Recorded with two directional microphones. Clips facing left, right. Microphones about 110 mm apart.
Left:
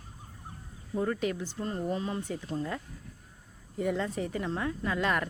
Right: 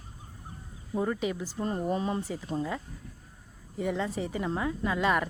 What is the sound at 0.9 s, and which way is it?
Speech, 10° right (ahead or behind).